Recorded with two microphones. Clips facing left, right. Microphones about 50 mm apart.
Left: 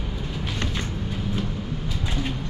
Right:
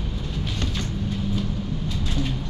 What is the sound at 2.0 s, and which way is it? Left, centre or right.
Vehicle, left.